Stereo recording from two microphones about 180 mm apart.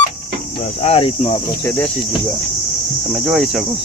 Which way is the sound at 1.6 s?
10° left (ahead or behind).